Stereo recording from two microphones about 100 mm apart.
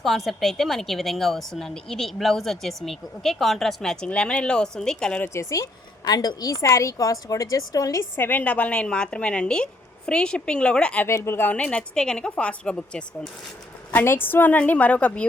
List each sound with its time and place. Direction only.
0.0 s a woman's voice: centre (ahead or behind)
5.2 s a woman's voice: 30° left (ahead or behind)
8.1 s a woman's voice: 20° left (ahead or behind)
11.0 s a woman's voice: 25° left (ahead or behind)
13.9 s a woman's voice: 20° left (ahead or behind)